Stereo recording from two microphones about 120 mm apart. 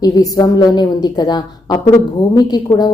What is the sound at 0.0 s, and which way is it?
A woman's voice, 30° left (ahead or behind).